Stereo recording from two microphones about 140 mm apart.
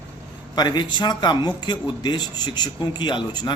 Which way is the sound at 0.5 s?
30° left (ahead or behind).